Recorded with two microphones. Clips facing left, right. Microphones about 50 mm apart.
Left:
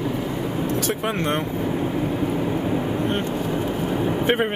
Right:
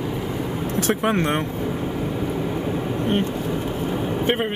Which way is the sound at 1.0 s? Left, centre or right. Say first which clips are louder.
Right 3 dB; centre.